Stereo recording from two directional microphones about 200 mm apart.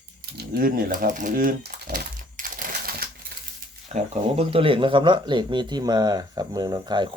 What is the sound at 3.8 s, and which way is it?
Speech, 35° right (ahead or behind).